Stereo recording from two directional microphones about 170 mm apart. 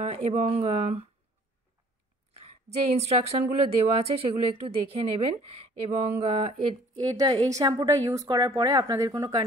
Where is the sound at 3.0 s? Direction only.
40° right (ahead or behind).